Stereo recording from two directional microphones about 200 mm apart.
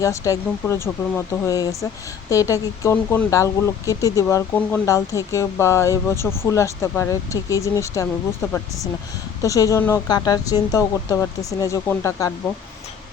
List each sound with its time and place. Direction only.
0.0 s speech: 15° left (ahead or behind)